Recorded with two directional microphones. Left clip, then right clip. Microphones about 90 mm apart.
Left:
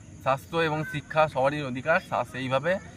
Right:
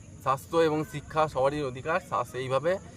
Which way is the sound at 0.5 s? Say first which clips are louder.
Right 2 dB; 45° right (ahead or behind).